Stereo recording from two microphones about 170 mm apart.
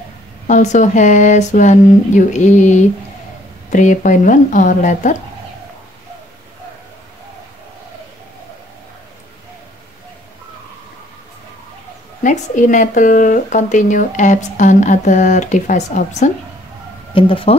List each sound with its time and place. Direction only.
0.5 s speech: 45° left (ahead or behind)
12.2 s speech: 50° left (ahead or behind)
17.1 s speech: 30° left (ahead or behind)